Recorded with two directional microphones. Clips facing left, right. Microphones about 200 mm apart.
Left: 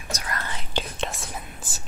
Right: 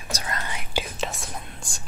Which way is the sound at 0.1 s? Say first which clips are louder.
Right 1 dB; 30° right (ahead or behind).